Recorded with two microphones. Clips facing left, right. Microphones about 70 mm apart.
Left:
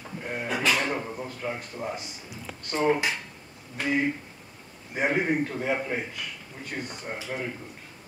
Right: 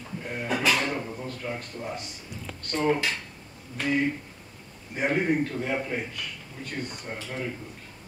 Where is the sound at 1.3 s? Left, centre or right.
Centre.